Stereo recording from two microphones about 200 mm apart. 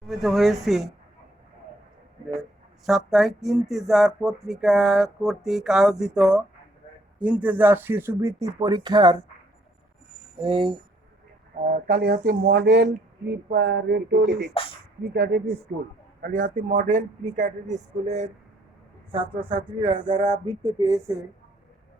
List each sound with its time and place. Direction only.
0.1 s speech: centre (ahead or behind)
2.8 s speech: centre (ahead or behind); by 9.1 s 20° right (ahead or behind)
10.4 s speech: 25° right (ahead or behind)
11.7 s speech: 50° right (ahead or behind)
16.2 s speech: 40° right (ahead or behind); by 21.2 s 15° right (ahead or behind)